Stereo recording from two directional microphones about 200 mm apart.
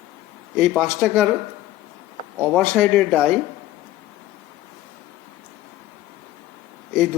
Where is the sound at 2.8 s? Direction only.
Centre (ahead or behind).